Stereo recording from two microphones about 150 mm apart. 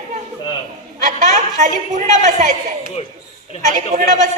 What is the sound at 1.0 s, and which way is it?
A woman's voice, 55° right (ahead or behind).